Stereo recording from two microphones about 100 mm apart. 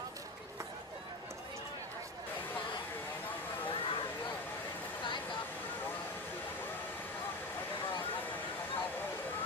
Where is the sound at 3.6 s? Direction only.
60° left (ahead or behind).